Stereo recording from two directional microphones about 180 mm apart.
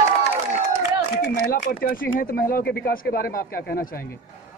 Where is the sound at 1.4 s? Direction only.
55° left (ahead or behind).